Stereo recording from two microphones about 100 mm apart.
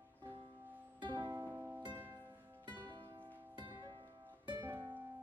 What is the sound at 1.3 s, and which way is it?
Music, 30° right (ahead or behind).